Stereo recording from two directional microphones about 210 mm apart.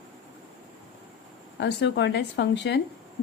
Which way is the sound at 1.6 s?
55° left (ahead or behind).